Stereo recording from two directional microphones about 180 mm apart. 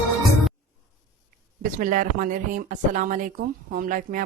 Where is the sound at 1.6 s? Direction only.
50° right (ahead or behind).